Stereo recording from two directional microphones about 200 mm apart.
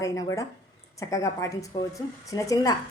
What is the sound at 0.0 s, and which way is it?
A woman's voice, 15° left (ahead or behind).